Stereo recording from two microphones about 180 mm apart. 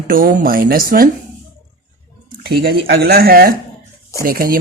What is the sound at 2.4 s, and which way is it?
A man's voice, 60° right (ahead or behind).